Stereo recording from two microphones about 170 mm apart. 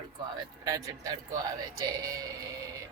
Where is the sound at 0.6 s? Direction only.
20° right (ahead or behind).